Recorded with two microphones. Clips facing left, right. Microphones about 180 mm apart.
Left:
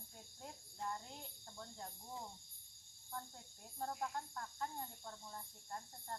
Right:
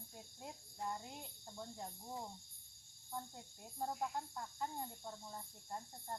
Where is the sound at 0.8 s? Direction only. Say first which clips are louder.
Right 1 dB; 15° right (ahead or behind).